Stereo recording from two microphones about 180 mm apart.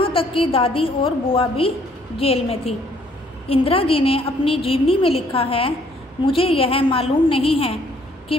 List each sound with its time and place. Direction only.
0.0 s a woman's voice: 30° left (ahead or behind)